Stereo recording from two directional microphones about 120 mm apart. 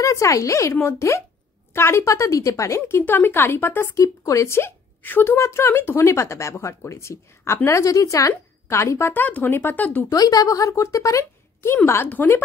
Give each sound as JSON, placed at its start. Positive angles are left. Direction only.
{"t": 0.0, "sound": "speech", "side_deg": 25}
{"t": 10.0, "sound": "speech", "side_deg": 30}